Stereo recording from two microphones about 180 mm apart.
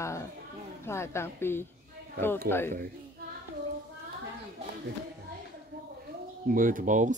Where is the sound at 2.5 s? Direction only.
55° right (ahead or behind).